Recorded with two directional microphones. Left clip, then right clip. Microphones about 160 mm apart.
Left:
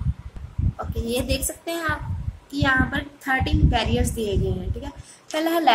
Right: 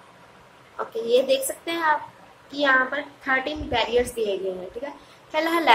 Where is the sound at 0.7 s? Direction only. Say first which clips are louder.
Right 6 dB; 25° left (ahead or behind).